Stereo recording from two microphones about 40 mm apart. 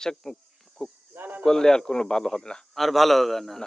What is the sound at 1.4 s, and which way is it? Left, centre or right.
Speech, centre.